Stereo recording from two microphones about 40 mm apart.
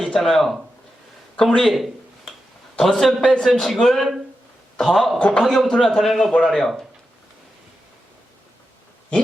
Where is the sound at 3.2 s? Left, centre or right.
Left.